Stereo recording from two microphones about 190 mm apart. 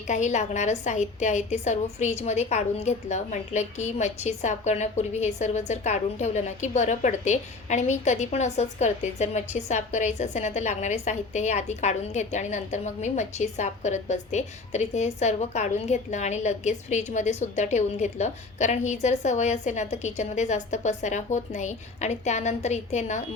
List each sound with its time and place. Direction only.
0.1 s a woman's voice: 40° left (ahead or behind)